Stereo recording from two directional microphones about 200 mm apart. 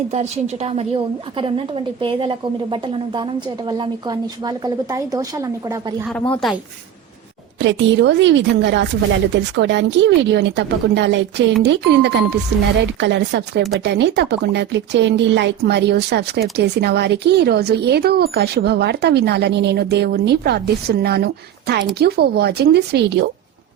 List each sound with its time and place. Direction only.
0.1 s a woman's voice: 35° right (ahead or behind); by 5.9 s 15° right (ahead or behind)
6.3 s speech: centre (ahead or behind)
7.6 s speech: 65° right (ahead or behind)